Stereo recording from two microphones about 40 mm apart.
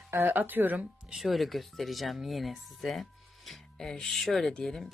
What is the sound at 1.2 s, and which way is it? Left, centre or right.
Speech, centre.